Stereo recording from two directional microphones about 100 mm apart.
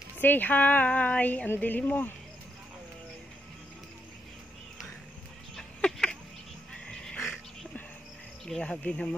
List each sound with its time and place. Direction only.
0.2 s speech: 20° left (ahead or behind)
5.6 s a sound: 5° left (ahead or behind)
7.2 s music: 25° left (ahead or behind)
8.5 s speech: 10° left (ahead or behind)